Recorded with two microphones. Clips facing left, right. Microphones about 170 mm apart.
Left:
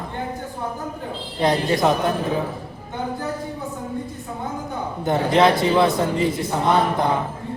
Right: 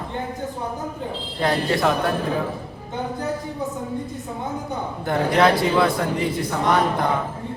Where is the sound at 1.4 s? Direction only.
20° left (ahead or behind).